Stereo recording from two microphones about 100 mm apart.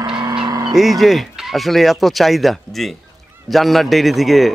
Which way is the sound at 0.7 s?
Centre (ahead or behind).